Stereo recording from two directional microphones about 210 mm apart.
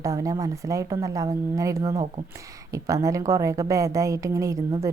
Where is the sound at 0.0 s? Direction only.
15° right (ahead or behind).